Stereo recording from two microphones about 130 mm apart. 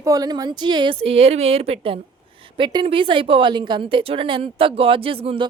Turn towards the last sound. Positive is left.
turn(degrees=-45)  # may be behind; listen again after turning